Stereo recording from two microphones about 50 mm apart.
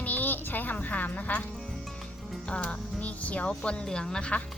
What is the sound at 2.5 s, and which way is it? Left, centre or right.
Speech, left.